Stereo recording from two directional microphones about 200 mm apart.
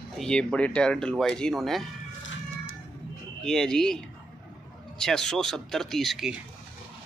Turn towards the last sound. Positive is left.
turn(degrees=0)  # may be behind; listen again after turning